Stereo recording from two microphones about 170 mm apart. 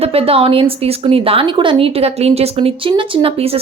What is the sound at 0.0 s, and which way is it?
Speech, 35° right (ahead or behind).